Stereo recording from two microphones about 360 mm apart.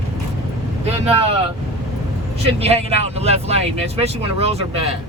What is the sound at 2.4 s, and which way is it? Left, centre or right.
Speech, centre.